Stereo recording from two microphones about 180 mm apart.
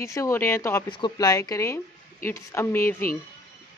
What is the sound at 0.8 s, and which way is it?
A woman's voice, 25° left (ahead or behind).